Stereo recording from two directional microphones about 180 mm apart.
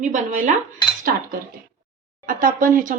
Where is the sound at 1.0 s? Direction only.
50° right (ahead or behind).